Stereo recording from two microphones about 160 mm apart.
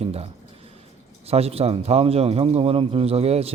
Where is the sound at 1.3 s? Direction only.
40° right (ahead or behind).